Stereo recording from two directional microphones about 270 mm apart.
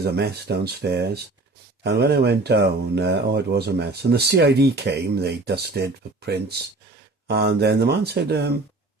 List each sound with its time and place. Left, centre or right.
0.0 s speech: right